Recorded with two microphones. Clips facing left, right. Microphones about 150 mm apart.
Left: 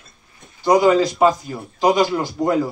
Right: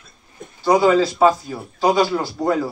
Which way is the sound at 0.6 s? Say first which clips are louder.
Left 1 dB; 15° left (ahead or behind).